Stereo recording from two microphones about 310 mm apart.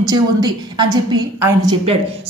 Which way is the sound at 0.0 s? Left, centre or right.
Centre.